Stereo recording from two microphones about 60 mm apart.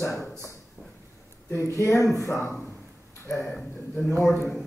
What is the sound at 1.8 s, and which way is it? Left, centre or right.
Speech, left.